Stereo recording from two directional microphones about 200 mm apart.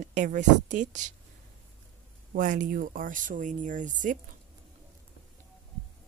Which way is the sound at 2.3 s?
40° right (ahead or behind).